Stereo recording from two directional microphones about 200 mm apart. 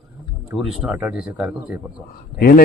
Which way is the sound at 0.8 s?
5° right (ahead or behind).